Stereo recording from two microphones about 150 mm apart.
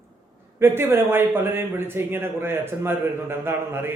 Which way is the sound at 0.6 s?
15° right (ahead or behind).